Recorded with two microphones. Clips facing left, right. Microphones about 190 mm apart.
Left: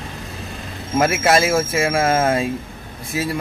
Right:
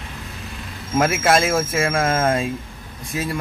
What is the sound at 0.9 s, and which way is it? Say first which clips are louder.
A man's voice: left 1 dB; centre (ahead or behind).